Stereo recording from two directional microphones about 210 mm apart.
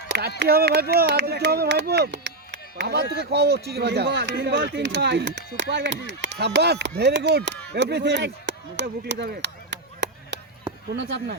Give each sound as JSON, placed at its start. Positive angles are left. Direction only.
{"t": 0.1, "sound": "speech", "side_deg": -50}
{"t": 7.7, "sound": "chop", "side_deg": -50}
{"t": 10.8, "sound": "speech", "side_deg": -55}